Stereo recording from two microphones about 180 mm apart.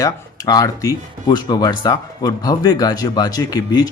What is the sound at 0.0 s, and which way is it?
Speech, 20° left (ahead or behind).